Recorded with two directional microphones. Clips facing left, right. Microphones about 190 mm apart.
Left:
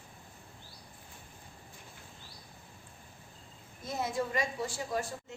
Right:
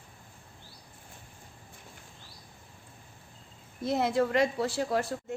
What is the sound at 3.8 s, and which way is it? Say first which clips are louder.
A woman's voice: right 7 dB; 65° right (ahead or behind).